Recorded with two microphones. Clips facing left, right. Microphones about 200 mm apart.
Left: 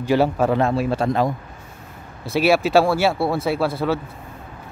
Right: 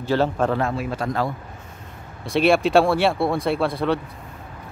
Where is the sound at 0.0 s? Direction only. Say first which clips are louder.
Left 3 dB; 10° left (ahead or behind).